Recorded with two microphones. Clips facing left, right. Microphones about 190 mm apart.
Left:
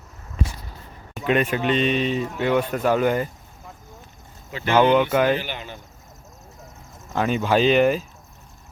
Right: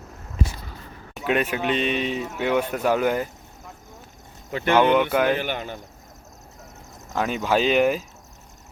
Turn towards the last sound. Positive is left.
turn(degrees=-5)  # may be behind; listen again after turning